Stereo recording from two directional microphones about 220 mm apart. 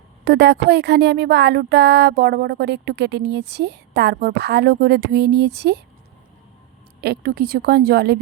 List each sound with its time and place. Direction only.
0.3 s speech: 50° right (ahead or behind)
7.0 s speech: 45° right (ahead or behind)